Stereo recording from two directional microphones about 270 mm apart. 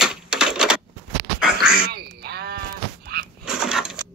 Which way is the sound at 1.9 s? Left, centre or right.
Right.